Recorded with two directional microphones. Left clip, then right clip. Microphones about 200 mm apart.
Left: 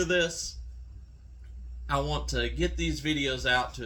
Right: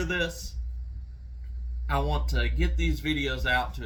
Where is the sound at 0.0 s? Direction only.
15° right (ahead or behind).